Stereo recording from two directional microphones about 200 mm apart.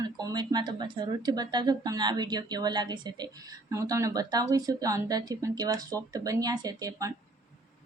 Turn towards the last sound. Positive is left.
turn(degrees=-20)  # may be behind; listen again after turning